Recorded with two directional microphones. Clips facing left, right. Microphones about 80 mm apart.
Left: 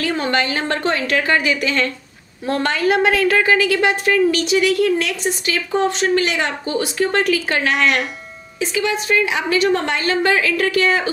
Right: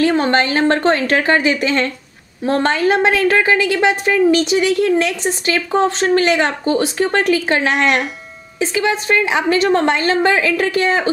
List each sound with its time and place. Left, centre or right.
0.0 s a woman's voice: right